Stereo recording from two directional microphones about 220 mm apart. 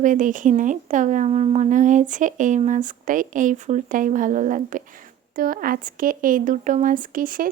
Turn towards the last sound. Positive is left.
turn(degrees=-40)  # may be behind; listen again after turning